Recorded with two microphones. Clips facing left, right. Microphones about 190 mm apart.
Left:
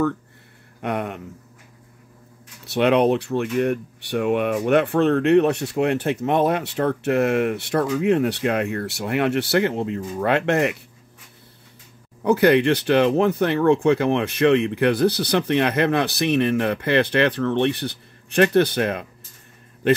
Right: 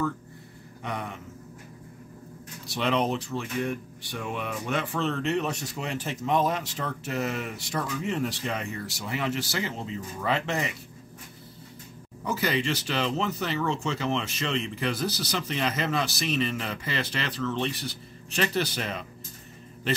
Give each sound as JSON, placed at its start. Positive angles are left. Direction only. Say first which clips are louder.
{"t": 0.8, "sound": "speech", "louder": "left 9 dB", "side_deg": 65}
{"t": 2.6, "sound": "speech", "louder": "left 9 dB", "side_deg": 65}
{"t": 12.3, "sound": "speech", "louder": "left 12 dB", "side_deg": 60}